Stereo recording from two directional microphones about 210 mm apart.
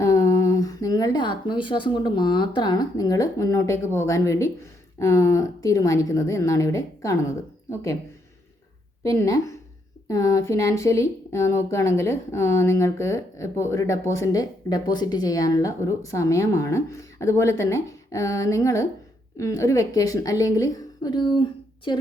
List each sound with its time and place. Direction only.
0.0 s speech: 15° left (ahead or behind)
9.0 s speech: 15° left (ahead or behind)